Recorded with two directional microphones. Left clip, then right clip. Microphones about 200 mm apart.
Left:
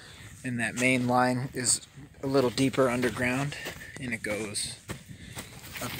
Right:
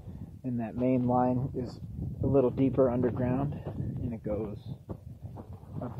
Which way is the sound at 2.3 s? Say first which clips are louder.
Left 1 dB; 25° left (ahead or behind).